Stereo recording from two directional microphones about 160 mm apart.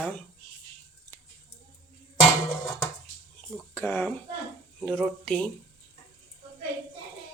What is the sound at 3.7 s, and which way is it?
Speech, 15° left (ahead or behind).